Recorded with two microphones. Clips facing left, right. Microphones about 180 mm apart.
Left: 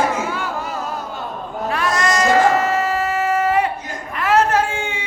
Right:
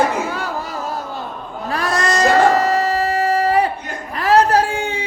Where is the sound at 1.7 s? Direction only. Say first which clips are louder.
Right 1 dB; 35° right (ahead or behind).